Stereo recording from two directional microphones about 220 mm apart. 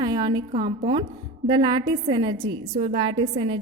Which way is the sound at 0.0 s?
20° right (ahead or behind).